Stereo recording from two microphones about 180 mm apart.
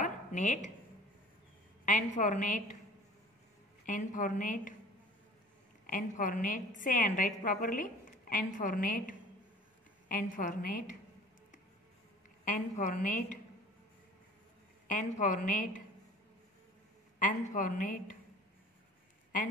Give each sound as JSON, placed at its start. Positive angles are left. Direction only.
{"t": 0.0, "sound": "a sound", "side_deg": 40}
{"t": 1.9, "sound": "a woman's voice", "side_deg": 45}
{"t": 3.8, "sound": "a woman's voice", "side_deg": 45}
{"t": 5.9, "sound": "a woman's voice", "side_deg": 45}
{"t": 12.4, "sound": "a woman's voice", "side_deg": 45}
{"t": 14.9, "sound": "a woman's voice", "side_deg": 45}
{"t": 17.2, "sound": "a woman's voice", "side_deg": 50}